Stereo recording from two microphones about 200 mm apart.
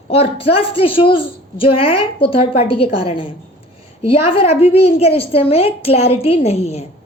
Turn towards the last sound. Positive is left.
turn(degrees=30)  # may be behind; listen again after turning